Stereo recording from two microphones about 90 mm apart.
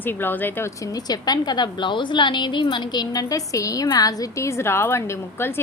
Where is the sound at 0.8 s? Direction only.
40° left (ahead or behind).